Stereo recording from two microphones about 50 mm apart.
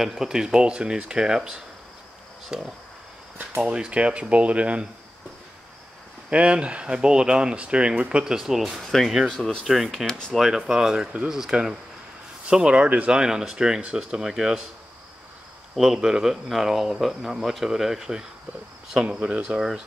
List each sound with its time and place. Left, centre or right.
0.2 s speech: centre; by 4.8 s right
6.3 s speech: right
8.4 s speech: centre; by 13.1 s right
13.1 s speech: centre
15.7 s speech: centre
19.1 s speech: right